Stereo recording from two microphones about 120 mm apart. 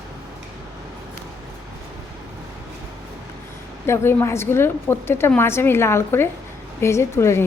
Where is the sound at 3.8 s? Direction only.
20° left (ahead or behind).